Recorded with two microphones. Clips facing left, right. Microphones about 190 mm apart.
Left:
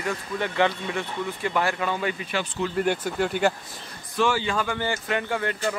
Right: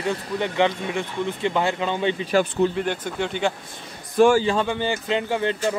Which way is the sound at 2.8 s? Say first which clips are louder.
Left 1 dB; 5° left (ahead or behind).